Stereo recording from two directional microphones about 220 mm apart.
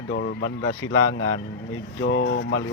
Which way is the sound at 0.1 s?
50° left (ahead or behind).